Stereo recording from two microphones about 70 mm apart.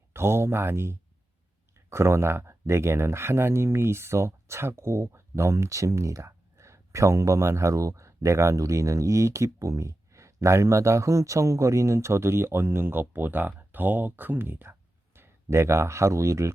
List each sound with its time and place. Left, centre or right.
0.1 s speech: right